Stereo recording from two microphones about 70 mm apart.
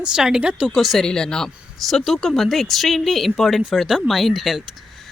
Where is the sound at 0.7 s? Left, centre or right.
Centre.